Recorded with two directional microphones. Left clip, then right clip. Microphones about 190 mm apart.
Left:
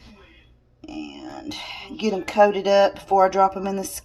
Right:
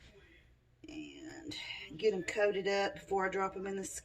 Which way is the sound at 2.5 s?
45° left (ahead or behind).